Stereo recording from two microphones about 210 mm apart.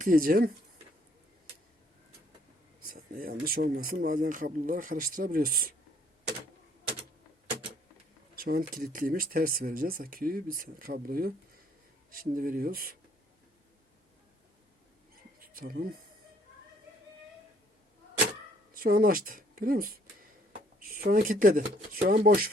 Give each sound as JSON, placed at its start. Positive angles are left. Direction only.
{"t": 0.0, "sound": "speech", "side_deg": -40}
{"t": 2.8, "sound": "speech", "side_deg": -45}
{"t": 8.4, "sound": "speech", "side_deg": -45}
{"t": 15.4, "sound": "speech", "side_deg": -45}
{"t": 18.8, "sound": "speech", "side_deg": -45}